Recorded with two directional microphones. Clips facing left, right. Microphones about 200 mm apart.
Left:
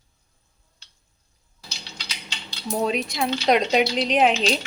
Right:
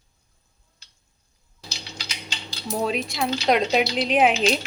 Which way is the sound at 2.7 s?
Centre (ahead or behind).